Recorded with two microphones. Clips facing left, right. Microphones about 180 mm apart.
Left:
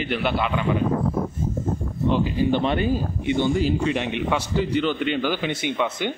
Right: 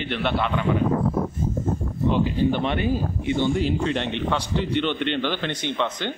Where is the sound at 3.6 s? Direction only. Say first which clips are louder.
Left 1 dB; 5° left (ahead or behind).